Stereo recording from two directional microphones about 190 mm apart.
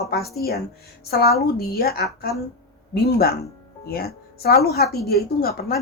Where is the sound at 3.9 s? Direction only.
55° left (ahead or behind).